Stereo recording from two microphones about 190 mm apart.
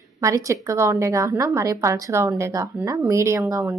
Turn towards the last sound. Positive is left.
turn(degrees=-15)  # may be behind; listen again after turning